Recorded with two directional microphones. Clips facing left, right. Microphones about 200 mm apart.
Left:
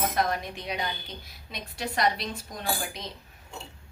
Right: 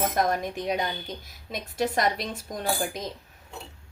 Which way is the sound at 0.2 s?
45° right (ahead or behind).